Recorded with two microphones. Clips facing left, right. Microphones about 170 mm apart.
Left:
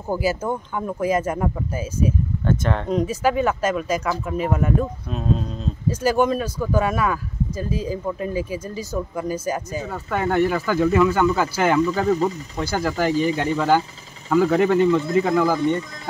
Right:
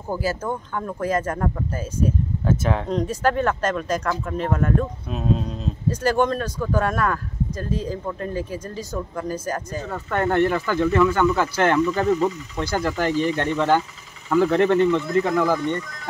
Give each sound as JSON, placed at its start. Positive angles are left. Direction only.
{"t": 0.1, "sound": "speech", "side_deg": 10}
{"t": 2.4, "sound": "speech", "side_deg": -5}
{"t": 12.1, "sound": "speech", "side_deg": 35}
{"t": 12.5, "sound": "speech", "side_deg": 0}